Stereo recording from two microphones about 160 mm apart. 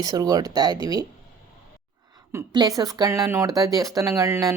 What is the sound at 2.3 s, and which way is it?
A woman's voice, 25° right (ahead or behind).